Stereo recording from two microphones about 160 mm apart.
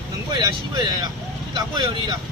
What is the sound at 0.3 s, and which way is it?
Speech, 25° right (ahead or behind).